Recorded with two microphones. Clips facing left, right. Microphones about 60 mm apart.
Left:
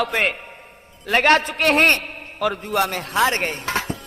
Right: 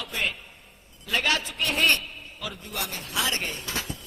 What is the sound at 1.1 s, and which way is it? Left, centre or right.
A man's voice, left.